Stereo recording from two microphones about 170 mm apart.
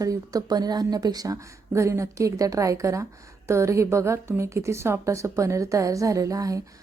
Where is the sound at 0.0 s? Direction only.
20° right (ahead or behind).